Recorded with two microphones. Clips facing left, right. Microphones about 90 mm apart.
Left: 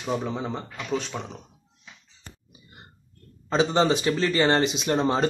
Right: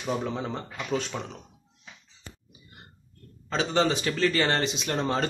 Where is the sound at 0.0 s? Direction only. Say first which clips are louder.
Left 1 dB; 5° left (ahead or behind).